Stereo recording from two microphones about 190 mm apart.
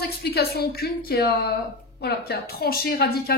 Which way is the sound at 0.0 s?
55° left (ahead or behind).